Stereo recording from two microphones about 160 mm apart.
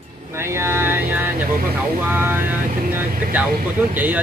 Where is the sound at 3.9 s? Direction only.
10° right (ahead or behind).